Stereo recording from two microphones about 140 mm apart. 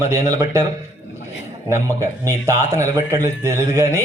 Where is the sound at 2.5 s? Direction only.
55° left (ahead or behind).